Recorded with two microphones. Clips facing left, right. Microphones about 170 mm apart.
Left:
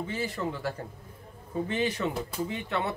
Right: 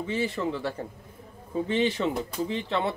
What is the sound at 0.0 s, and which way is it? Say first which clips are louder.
Speech: right 4 dB; 25° right (ahead or behind).